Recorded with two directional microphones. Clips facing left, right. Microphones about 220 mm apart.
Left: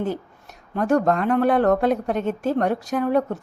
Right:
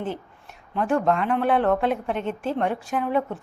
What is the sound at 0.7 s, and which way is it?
A woman's voice, 45° left (ahead or behind).